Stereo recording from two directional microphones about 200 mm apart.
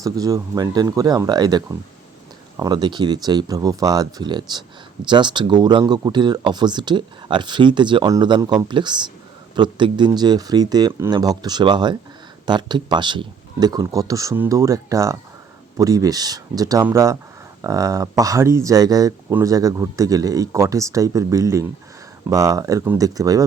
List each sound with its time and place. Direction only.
0.0 s speech: 15° right (ahead or behind)